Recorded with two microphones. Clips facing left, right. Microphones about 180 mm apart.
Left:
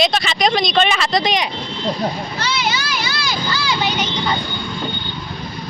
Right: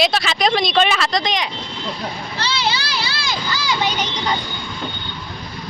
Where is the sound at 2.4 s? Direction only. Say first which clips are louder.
Right 2 dB; 30° right (ahead or behind).